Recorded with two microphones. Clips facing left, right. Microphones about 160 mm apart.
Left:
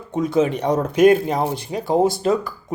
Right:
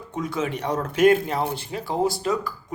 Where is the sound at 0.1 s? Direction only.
20° left (ahead or behind).